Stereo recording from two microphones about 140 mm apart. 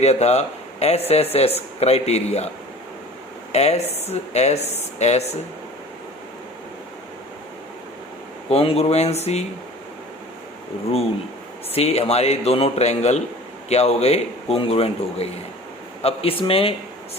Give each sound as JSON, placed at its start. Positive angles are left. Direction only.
{"t": 0.0, "sound": "speech", "side_deg": 50}
{"t": 3.5, "sound": "speech", "side_deg": 50}
{"t": 8.4, "sound": "speech", "side_deg": 45}
{"t": 11.7, "sound": "speech", "side_deg": 45}